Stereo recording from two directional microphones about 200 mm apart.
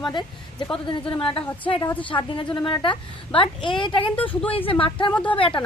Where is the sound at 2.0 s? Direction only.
25° left (ahead or behind).